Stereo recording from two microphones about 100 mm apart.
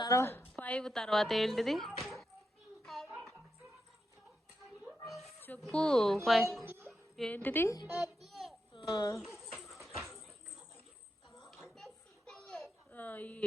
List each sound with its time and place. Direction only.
0.1 s a woman's voice: 25° left (ahead or behind)
0.5 s speech: 10° left (ahead or behind)
2.8 s music: centre (ahead or behind)
4.8 s a sound: centre (ahead or behind)
5.7 s a woman's voice: 5° left (ahead or behind)
7.3 s a woman's voice: 15° left (ahead or behind)
8.0 s a sound: centre (ahead or behind)
8.7 s a sound: 50° left (ahead or behind)
9.2 s bird: centre (ahead or behind)
9.5 s music: centre (ahead or behind)
11.3 s a sound: centre (ahead or behind)
12.9 s speech: 15° left (ahead or behind)